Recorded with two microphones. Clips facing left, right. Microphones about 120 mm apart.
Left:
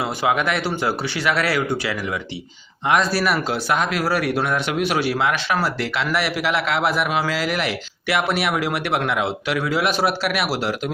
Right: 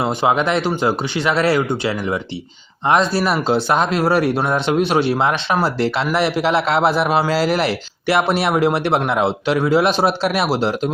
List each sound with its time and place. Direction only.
0.0 s a man's voice: 25° right (ahead or behind)